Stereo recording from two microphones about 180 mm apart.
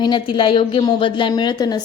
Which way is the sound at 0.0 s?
25° left (ahead or behind).